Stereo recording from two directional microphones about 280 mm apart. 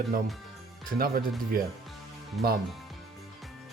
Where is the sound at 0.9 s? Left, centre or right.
Right.